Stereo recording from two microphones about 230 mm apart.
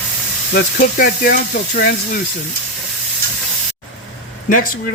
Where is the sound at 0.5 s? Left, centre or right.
Left.